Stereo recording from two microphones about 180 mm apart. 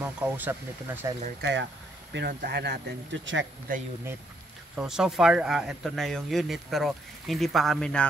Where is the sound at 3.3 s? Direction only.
90° right.